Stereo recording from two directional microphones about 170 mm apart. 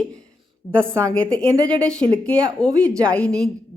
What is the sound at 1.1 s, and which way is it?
A woman's voice, 5° left (ahead or behind).